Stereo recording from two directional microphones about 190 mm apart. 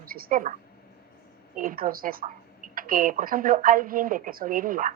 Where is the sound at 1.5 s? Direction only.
50° right (ahead or behind).